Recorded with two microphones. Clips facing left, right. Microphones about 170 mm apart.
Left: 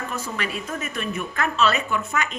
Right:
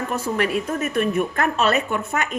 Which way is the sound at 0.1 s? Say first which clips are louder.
Right 7 dB; 55° right (ahead or behind).